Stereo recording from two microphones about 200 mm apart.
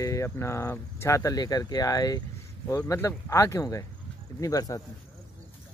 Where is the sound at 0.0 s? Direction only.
15° left (ahead or behind).